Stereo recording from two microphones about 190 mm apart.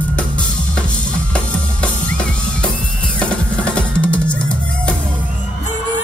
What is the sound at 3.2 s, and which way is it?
Drum, 5° left (ahead or behind).